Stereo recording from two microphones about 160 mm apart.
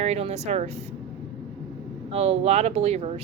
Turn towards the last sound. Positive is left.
turn(degrees=-40)  # may be behind; listen again after turning